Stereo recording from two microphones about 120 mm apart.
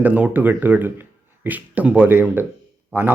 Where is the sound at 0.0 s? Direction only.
15° right (ahead or behind).